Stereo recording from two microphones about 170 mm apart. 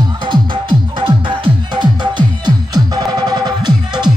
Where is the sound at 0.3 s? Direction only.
30° right (ahead or behind).